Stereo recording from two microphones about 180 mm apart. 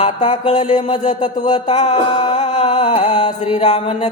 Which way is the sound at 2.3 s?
40° left (ahead or behind).